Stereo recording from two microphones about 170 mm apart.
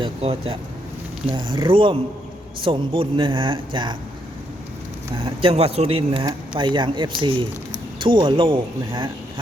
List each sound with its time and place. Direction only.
0.0 s speech: 35° right (ahead or behind)
5.1 s speech: 30° right (ahead or behind)